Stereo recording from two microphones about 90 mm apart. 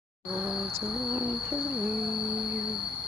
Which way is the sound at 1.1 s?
20° right (ahead or behind).